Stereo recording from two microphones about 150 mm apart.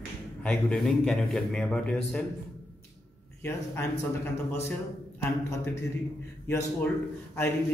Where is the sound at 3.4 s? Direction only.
20° left (ahead or behind).